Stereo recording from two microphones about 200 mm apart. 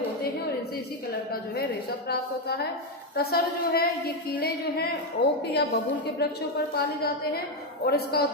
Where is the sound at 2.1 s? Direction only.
55° left (ahead or behind).